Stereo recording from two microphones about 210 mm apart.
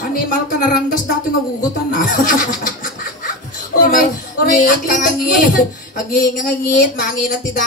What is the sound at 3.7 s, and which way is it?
Speech, 45° left (ahead or behind).